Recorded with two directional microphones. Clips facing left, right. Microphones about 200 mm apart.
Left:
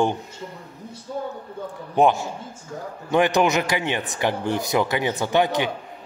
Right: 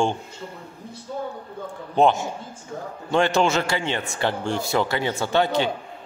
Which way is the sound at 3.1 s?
15° left (ahead or behind).